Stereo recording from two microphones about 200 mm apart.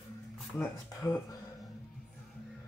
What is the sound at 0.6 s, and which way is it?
Speech, 15° left (ahead or behind).